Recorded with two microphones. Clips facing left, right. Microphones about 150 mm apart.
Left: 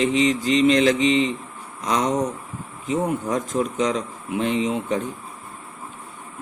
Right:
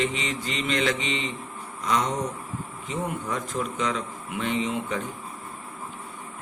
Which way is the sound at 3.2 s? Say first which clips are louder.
Left 6 dB; 40° left (ahead or behind).